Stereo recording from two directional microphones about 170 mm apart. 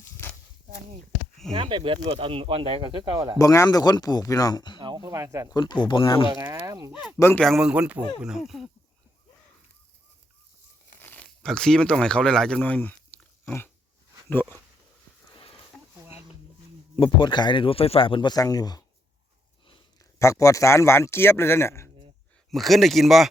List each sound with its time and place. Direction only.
1.5 s speech: 30° right (ahead or behind)
3.3 s speech: 20° left (ahead or behind)
4.8 s speech: 25° right (ahead or behind)
5.5 s speech: 25° left (ahead or behind)
6.7 s speech: 20° right (ahead or behind)
7.2 s speech: 15° left (ahead or behind)
7.4 s speech: centre (ahead or behind)
11.0 s speech: 10° left (ahead or behind)
17.0 s speech: 30° left (ahead or behind)
20.1 s speech: 20° left (ahead or behind)
22.5 s speech: centre (ahead or behind)